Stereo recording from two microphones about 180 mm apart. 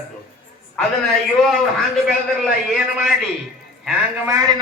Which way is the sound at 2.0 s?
Centre (ahead or behind).